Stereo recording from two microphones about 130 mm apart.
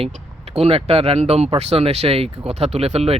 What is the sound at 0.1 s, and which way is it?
Speech, 55° right (ahead or behind).